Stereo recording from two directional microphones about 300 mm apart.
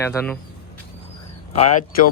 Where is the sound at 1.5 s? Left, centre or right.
Left.